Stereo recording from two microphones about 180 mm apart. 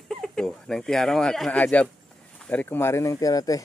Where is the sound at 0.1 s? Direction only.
Centre (ahead or behind).